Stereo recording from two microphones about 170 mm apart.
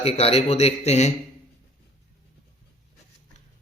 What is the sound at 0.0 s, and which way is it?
Speech, 35° left (ahead or behind).